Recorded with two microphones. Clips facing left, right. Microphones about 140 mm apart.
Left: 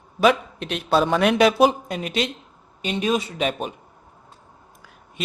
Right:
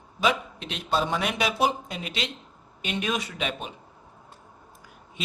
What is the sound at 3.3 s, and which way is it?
Speech, 40° left (ahead or behind).